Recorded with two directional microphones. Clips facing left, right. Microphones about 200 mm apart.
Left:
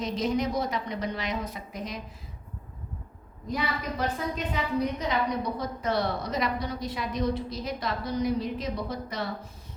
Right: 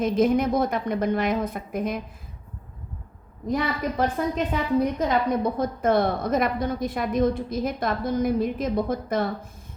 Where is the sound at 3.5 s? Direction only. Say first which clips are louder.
Right 6 dB; 50° right (ahead or behind).